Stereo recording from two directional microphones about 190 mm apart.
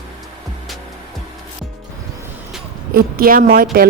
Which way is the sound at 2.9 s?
50° right (ahead or behind).